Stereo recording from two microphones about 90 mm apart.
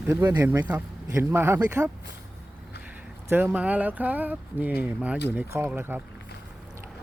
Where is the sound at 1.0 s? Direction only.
30° right (ahead or behind).